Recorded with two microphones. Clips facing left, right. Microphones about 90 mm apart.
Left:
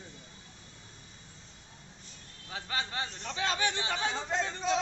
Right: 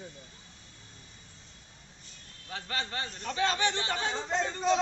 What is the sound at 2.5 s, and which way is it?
Speech, 10° left (ahead or behind).